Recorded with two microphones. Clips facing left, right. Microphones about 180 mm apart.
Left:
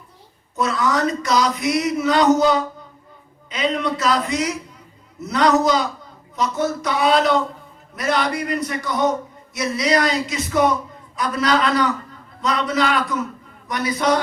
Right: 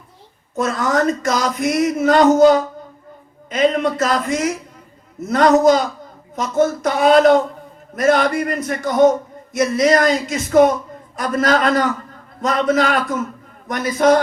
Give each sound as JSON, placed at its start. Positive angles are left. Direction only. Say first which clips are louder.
{"t": 0.5, "sound": "a man's voice", "louder": "right 2 dB", "side_deg": -50}